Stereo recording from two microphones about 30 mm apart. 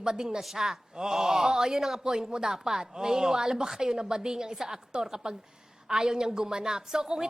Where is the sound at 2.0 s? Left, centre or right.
Right.